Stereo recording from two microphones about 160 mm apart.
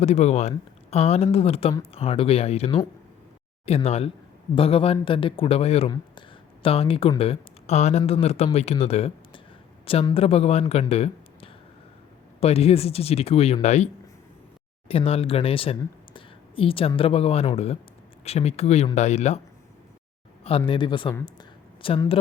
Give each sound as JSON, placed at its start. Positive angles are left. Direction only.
{"t": 0.0, "sound": "speech", "side_deg": 45}
{"t": 15.8, "sound": "a sound", "side_deg": 35}
{"t": 17.0, "sound": "speech", "side_deg": 35}
{"t": 20.7, "sound": "speech", "side_deg": 30}